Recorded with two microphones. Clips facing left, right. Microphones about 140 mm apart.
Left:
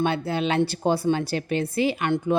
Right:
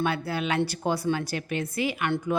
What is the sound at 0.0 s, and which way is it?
A woman's voice, 25° left (ahead or behind).